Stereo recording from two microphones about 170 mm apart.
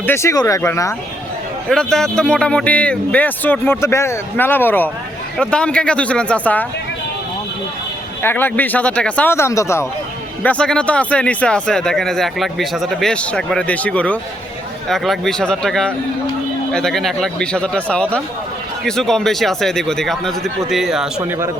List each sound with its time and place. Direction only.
0.0 s speech: 15° left (ahead or behind)
1.7 s speech: 5° left (ahead or behind)
8.2 s speech: 10° left (ahead or behind)
10.4 s speech: 5° left (ahead or behind)